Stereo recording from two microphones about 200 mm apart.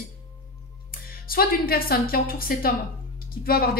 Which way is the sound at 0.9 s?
45° left (ahead or behind).